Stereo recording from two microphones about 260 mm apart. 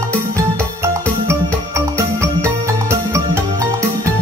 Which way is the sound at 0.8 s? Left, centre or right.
Centre.